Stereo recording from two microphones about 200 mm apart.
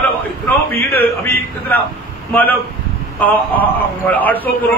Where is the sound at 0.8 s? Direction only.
15° left (ahead or behind).